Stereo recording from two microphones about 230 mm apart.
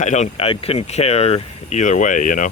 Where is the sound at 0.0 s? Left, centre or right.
Left.